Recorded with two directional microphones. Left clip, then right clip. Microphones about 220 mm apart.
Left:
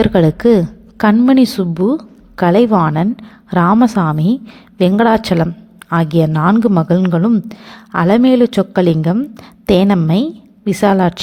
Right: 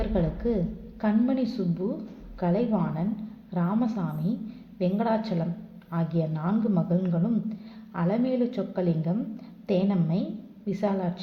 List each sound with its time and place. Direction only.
0.0 s a woman's voice: 40° left (ahead or behind)